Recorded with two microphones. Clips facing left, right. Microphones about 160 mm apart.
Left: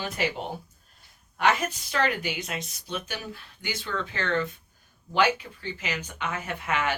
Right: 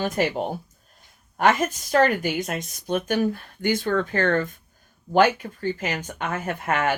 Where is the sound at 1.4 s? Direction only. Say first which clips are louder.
Right 4 dB; 45° right (ahead or behind).